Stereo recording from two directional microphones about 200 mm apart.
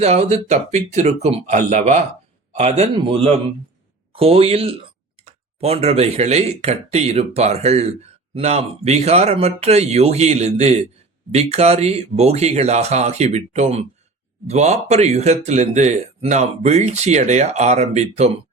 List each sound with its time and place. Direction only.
0.0 s speech: 30° right (ahead or behind)